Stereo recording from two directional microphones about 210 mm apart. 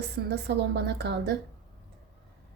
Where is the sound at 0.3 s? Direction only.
55° right (ahead or behind).